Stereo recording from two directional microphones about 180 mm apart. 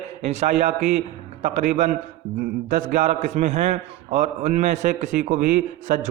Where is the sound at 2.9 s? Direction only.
45° right (ahead or behind).